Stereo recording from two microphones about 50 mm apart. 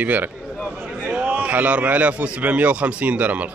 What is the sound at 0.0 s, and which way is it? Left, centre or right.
A man's voice, right.